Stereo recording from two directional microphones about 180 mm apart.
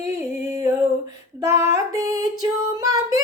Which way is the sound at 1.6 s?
20° right (ahead or behind).